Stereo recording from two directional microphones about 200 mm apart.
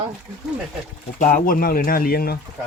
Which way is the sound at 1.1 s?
45° left (ahead or behind).